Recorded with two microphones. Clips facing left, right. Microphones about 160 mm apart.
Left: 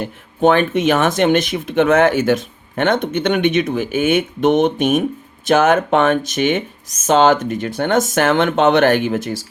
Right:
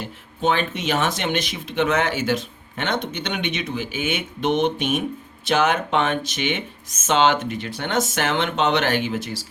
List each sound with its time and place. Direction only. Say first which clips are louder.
0.0 s speech: left 8 dB; 55° left (ahead or behind)